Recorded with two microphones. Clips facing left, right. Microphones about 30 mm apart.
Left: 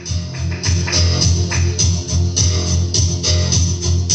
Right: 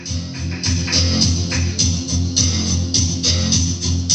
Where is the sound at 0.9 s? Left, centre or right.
Right.